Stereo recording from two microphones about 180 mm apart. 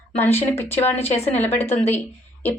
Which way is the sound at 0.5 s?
10° left (ahead or behind).